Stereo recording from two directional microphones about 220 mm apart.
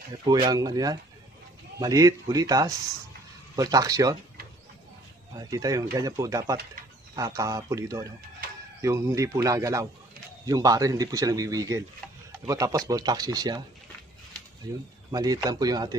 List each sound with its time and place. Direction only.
0.1 s a man's voice: 20° right (ahead or behind)
5.3 s a man's voice: 15° right (ahead or behind)
15.0 s a man's voice: 15° right (ahead or behind)